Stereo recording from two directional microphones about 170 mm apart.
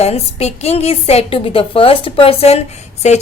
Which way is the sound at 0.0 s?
35° left (ahead or behind).